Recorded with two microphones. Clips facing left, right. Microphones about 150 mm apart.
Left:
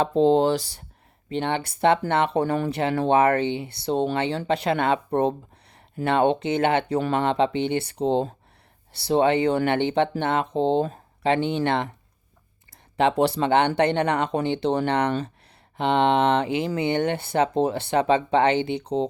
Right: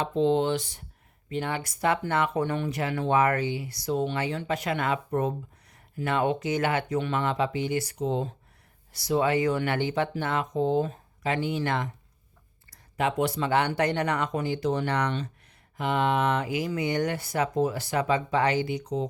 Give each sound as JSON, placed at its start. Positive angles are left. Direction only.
{"t": 0.0, "sound": "speech", "side_deg": 35}
{"t": 13.0, "sound": "speech", "side_deg": 30}
{"t": 15.0, "sound": "speech", "side_deg": 50}
{"t": 15.8, "sound": "speech", "side_deg": 30}